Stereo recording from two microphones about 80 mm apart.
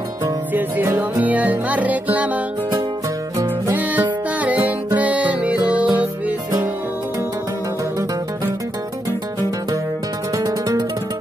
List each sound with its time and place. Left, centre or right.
0.5 s music: right
3.7 s music: right
10.3 s music: right